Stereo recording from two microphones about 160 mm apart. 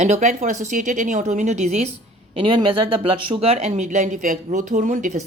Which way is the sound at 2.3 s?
30° right (ahead or behind).